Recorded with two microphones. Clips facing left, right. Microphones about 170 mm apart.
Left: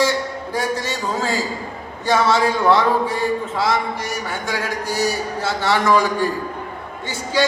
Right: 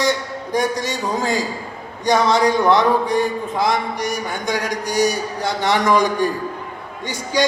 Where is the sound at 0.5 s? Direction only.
15° right (ahead or behind).